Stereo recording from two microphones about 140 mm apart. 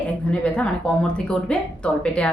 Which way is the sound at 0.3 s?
5° left (ahead or behind).